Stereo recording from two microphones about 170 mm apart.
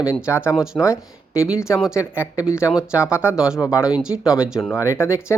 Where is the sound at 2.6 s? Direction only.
5° right (ahead or behind).